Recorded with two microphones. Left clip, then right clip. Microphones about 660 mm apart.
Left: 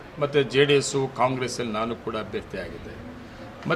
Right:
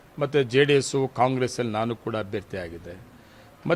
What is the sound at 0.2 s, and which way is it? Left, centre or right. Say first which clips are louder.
A man's voice: even; right.